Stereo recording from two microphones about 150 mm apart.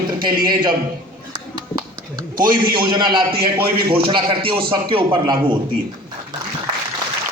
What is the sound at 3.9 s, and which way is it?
A man's voice, 35° right (ahead or behind).